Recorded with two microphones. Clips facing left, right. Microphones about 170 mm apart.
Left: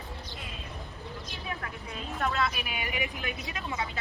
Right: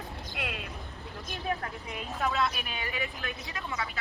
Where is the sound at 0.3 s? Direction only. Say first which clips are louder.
Right 6 dB; 70° right (ahead or behind).